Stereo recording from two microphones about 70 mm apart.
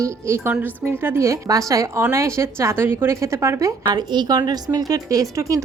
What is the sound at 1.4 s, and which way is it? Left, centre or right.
A woman's voice, right.